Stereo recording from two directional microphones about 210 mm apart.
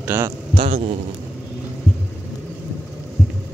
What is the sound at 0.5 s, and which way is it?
Speech, 30° right (ahead or behind).